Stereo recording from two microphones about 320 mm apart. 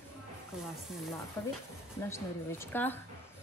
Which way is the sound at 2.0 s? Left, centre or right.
Centre.